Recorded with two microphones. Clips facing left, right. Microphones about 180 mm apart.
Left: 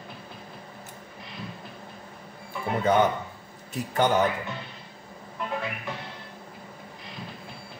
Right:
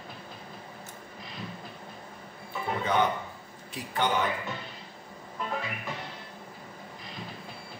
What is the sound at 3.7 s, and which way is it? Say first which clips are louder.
Speech: left 5 dB; 45° left (ahead or behind).